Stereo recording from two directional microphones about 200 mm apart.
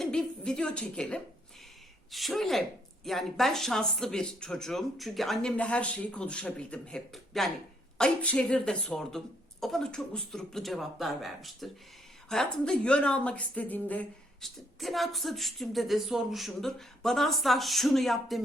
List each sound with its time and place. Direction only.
0.0 s a woman's voice: 5° left (ahead or behind)